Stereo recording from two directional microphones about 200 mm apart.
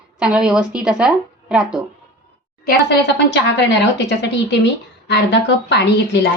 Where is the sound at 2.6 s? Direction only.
55° left (ahead or behind).